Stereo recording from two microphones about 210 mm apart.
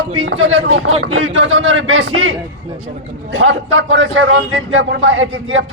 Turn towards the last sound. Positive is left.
turn(degrees=-65)  # may be behind; listen again after turning